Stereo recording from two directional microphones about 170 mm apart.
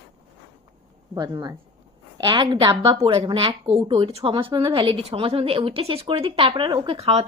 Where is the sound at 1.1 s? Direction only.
20° right (ahead or behind).